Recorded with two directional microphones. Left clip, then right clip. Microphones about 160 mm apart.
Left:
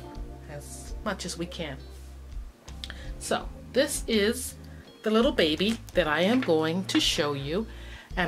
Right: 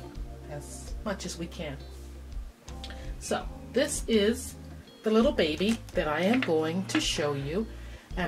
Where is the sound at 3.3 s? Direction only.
40° left (ahead or behind).